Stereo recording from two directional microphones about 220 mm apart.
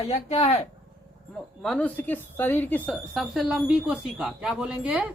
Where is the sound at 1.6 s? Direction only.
5° left (ahead or behind).